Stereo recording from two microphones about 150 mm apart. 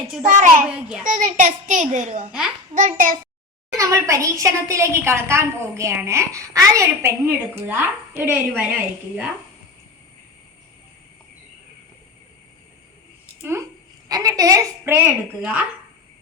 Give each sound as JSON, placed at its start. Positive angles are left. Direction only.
{"t": 0.3, "sound": "a child's voice", "side_deg": -55}
{"t": 0.6, "sound": "a woman's voice", "side_deg": -10}
{"t": 1.0, "sound": "a child's voice", "side_deg": -60}
{"t": 3.7, "sound": "a woman's voice", "side_deg": -20}
{"t": 13.4, "sound": "a woman's voice", "side_deg": -15}